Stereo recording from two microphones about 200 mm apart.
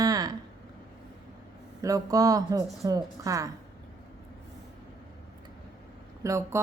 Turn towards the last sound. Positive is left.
turn(degrees=-15)  # may be behind; listen again after turning